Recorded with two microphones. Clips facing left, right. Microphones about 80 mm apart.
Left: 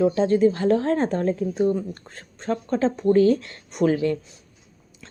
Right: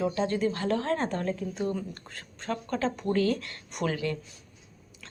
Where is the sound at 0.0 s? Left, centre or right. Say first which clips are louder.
Left 9 dB; left.